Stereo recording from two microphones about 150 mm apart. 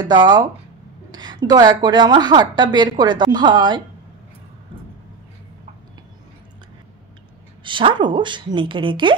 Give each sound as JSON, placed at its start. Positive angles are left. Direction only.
{"t": 0.0, "sound": "a woman's voice", "side_deg": -30}
{"t": 7.6, "sound": "a woman's voice", "side_deg": -35}